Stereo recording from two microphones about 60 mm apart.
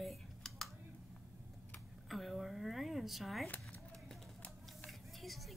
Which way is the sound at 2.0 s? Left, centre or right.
Centre.